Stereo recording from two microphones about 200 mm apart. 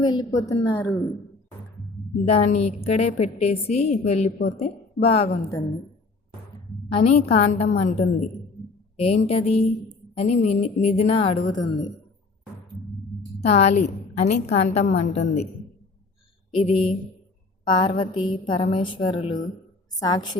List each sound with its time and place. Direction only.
0.0 s a woman's voice: 20° left (ahead or behind)
2.2 s a woman's voice: 30° left (ahead or behind)
6.9 s a woman's voice: 30° left (ahead or behind)
13.4 s a woman's voice: 35° left (ahead or behind)
16.6 s a woman's voice: 30° left (ahead or behind)